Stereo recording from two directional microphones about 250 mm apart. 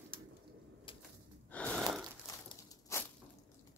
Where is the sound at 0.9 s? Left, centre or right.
Left.